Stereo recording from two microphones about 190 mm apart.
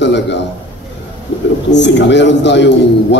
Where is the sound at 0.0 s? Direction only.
65° left (ahead or behind).